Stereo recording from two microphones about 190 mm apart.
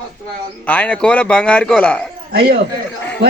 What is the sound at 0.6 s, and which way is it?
A man's voice, 10° left (ahead or behind).